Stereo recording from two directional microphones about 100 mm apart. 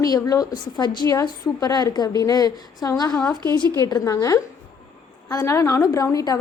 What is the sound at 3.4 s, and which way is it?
A woman's voice, 45° left (ahead or behind).